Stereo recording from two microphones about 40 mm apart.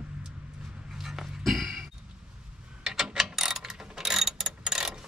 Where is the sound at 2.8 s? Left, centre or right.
Centre.